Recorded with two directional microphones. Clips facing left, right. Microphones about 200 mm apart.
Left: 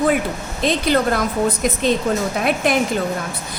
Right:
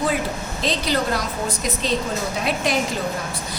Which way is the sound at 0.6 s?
55° left (ahead or behind).